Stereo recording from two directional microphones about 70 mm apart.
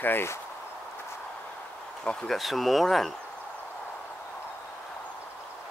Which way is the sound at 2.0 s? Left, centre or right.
Centre.